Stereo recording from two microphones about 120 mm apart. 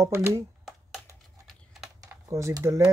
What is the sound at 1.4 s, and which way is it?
Typing, centre (ahead or behind).